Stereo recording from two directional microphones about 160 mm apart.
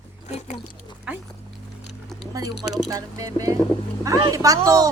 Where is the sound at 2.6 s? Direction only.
5° right (ahead or behind).